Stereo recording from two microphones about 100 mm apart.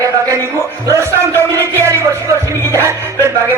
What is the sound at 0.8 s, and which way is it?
Music, 30° right (ahead or behind).